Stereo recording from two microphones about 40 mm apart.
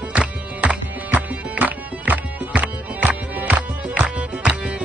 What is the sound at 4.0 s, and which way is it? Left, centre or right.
Music, right.